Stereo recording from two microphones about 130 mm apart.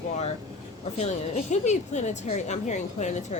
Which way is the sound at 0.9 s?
60° left (ahead or behind).